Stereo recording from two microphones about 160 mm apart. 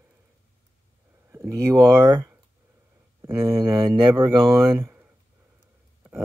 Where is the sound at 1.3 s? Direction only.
20° right (ahead or behind).